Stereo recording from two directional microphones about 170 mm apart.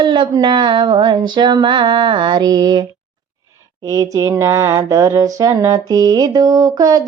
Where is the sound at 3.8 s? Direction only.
20° right (ahead or behind).